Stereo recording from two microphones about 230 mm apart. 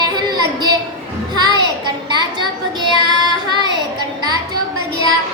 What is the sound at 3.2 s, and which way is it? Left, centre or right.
Child singing, centre.